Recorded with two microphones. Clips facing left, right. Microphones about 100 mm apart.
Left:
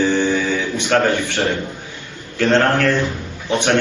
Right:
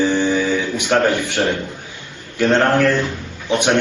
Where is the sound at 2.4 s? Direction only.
10° right (ahead or behind).